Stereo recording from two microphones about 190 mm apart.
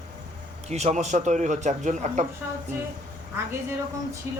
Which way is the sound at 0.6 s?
35° right (ahead or behind).